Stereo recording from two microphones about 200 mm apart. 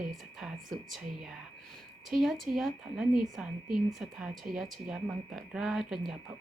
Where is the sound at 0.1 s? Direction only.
Centre (ahead or behind).